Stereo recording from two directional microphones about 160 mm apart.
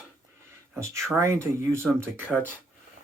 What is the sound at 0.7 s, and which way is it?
Speech, 15° right (ahead or behind).